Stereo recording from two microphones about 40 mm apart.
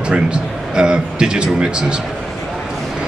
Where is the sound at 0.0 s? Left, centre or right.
Right.